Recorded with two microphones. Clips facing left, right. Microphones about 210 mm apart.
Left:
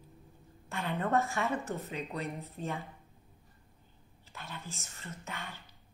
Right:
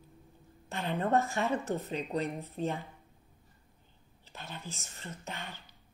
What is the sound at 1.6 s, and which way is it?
Speech, 30° right (ahead or behind).